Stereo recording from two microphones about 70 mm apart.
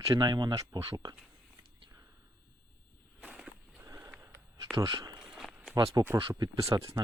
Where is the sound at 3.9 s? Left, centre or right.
Right.